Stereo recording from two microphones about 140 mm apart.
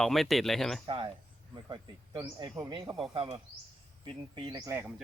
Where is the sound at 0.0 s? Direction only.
Centre (ahead or behind).